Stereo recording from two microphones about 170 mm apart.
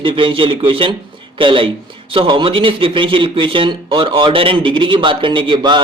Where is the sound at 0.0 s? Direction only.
30° right (ahead or behind).